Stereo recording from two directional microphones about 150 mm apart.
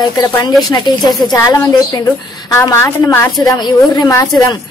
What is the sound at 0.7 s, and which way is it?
Speech, 25° left (ahead or behind).